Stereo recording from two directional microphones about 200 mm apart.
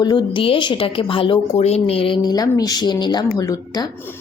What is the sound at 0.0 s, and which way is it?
A woman's voice, 25° left (ahead or behind).